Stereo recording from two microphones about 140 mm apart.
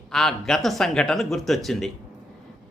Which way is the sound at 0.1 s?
5° left (ahead or behind).